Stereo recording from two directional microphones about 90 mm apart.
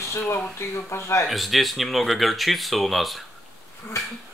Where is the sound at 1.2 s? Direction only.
Centre (ahead or behind).